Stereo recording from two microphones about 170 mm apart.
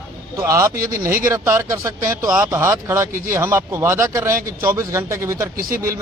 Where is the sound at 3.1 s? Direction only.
50° right (ahead or behind).